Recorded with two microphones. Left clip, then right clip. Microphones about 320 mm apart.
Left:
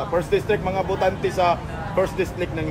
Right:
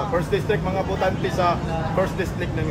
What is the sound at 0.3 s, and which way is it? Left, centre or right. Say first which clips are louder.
Speech: left 2 dB; left.